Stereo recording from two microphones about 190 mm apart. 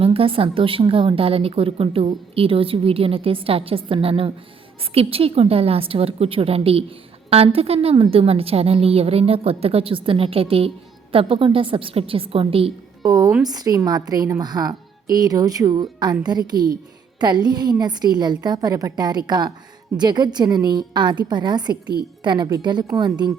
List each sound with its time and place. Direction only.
0.0 s a woman's voice: 30° right (ahead or behind)